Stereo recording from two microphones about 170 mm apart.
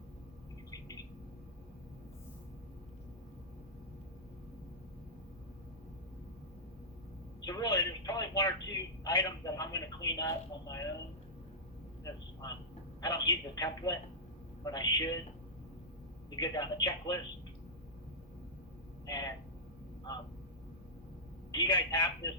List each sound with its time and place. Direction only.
7.4 s speech: 20° left (ahead or behind)
13.0 s speech: 20° left (ahead or behind)
16.3 s speech: 25° left (ahead or behind)
19.0 s speech: 20° left (ahead or behind)
21.5 s speech: 25° left (ahead or behind)